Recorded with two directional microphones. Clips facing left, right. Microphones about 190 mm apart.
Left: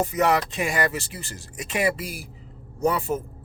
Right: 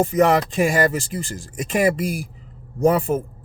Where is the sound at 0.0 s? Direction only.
50° right (ahead or behind).